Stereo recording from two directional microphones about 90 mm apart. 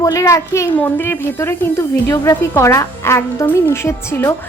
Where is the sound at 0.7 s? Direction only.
20° left (ahead or behind).